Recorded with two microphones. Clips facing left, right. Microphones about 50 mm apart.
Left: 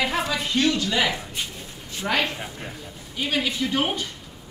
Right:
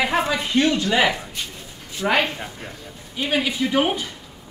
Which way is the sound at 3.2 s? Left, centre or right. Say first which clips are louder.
Right 3 dB; centre.